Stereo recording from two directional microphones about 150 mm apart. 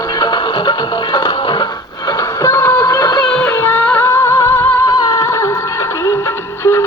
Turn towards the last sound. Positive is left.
turn(degrees=15)  # may be behind; listen again after turning